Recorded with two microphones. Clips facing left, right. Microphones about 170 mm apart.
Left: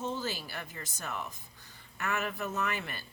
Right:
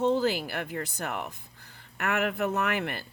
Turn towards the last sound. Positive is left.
turn(degrees=-60)  # may be behind; listen again after turning